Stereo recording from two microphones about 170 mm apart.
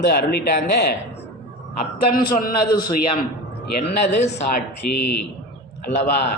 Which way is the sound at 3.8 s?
40° left (ahead or behind).